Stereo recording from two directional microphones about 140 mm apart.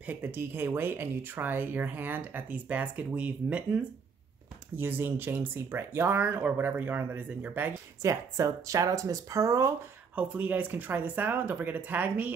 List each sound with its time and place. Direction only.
0.0 s speech: 15° right (ahead or behind)
8.0 s speech: 25° right (ahead or behind)
10.1 s speech: 10° right (ahead or behind)